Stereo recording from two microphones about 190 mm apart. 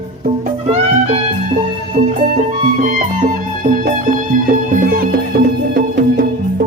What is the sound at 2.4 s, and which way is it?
Music, 45° right (ahead or behind).